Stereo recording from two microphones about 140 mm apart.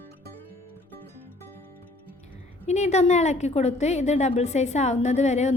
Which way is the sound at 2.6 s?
55° left (ahead or behind).